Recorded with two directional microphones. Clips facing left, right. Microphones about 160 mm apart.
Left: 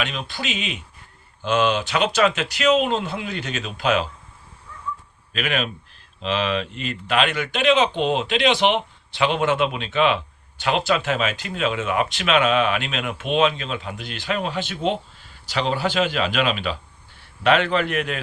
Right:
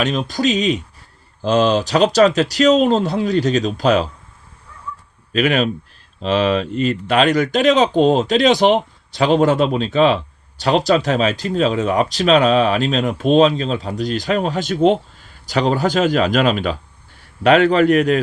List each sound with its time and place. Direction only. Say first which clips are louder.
0.0 s speech: right 10 dB; 40° right (ahead or behind)
5.3 s a man's voice: right 9 dB; 40° right (ahead or behind)